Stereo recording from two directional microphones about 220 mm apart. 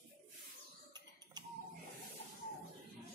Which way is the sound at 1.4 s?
20° right (ahead or behind).